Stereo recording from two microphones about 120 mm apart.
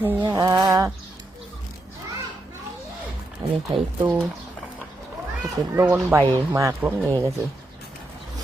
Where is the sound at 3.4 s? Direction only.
45° right (ahead or behind).